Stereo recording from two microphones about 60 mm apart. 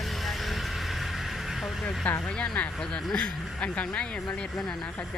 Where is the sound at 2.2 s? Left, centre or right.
Centre.